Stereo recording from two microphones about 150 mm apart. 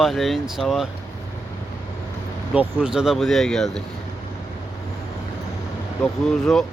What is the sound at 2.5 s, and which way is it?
Speech, 5° right (ahead or behind).